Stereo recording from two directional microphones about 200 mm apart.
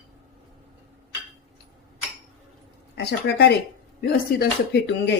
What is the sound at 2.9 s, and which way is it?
Speech, 55° left (ahead or behind).